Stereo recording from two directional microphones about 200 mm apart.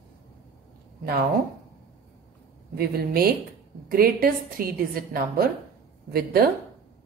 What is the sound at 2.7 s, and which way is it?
A woman's voice, 50° right (ahead or behind).